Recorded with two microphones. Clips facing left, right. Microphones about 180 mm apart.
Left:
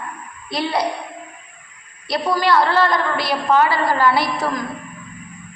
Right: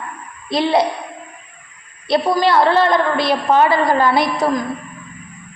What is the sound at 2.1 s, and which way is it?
A woman's voice, 25° right (ahead or behind).